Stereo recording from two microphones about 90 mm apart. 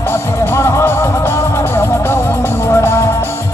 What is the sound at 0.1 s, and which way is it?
Music, 30° left (ahead or behind).